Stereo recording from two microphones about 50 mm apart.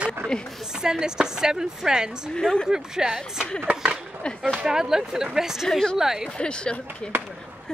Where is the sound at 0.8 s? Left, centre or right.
Centre.